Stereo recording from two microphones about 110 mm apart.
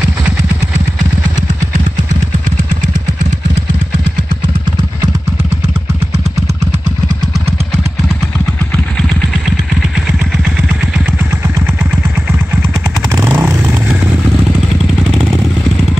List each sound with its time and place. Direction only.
13.1 s vehicle: 20° right (ahead or behind)